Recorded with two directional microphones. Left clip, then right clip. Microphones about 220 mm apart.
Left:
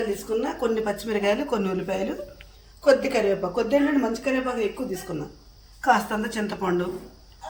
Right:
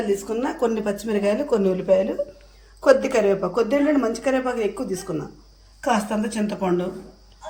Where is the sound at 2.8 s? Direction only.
5° right (ahead or behind).